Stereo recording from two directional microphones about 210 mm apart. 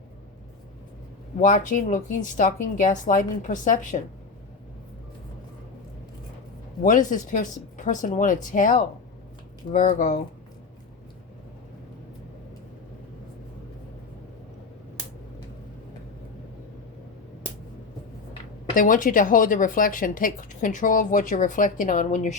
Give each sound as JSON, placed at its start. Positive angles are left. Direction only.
{"t": 1.4, "sound": "a woman's voice", "side_deg": 40}
{"t": 6.8, "sound": "a woman's voice", "side_deg": 40}
{"t": 18.7, "sound": "a woman's voice", "side_deg": 40}